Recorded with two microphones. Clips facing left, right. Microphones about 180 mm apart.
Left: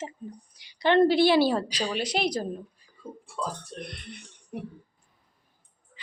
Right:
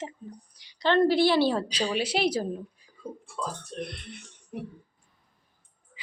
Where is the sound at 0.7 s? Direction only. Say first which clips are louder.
Left 2 dB; 15° left (ahead or behind).